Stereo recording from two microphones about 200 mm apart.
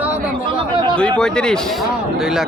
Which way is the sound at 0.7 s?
25° right (ahead or behind).